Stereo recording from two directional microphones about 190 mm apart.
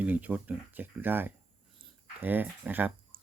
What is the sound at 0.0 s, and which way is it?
Speech, 10° right (ahead or behind).